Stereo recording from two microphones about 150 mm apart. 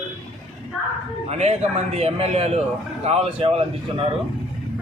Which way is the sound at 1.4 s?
45° right (ahead or behind).